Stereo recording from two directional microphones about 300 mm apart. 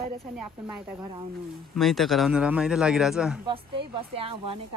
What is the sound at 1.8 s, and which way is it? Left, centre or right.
Speech, centre.